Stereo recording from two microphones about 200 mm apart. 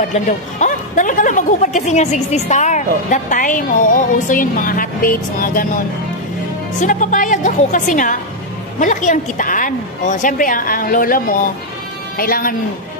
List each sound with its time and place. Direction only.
0.1 s a woman's voice: 40° left (ahead or behind)
6.8 s a woman's voice: 40° left (ahead or behind)